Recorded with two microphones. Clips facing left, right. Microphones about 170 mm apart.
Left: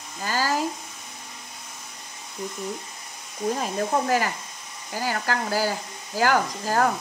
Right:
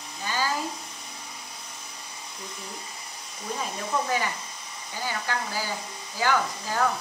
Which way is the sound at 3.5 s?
50° left (ahead or behind).